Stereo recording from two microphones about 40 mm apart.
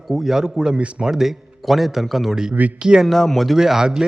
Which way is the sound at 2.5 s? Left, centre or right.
Right.